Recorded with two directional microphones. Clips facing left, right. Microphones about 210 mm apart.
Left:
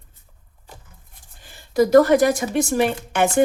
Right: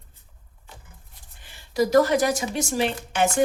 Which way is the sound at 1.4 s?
50° left (ahead or behind).